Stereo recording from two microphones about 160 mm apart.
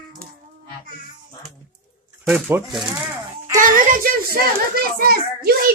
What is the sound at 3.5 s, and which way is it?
A child's voice, 55° right (ahead or behind).